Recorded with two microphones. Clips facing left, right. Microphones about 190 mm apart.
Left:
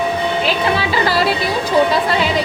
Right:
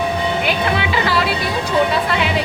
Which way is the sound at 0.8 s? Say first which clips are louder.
Left 2 dB; 40° left (ahead or behind).